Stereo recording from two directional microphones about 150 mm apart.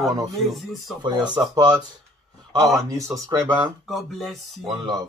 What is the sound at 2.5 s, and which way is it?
Speech, 25° right (ahead or behind).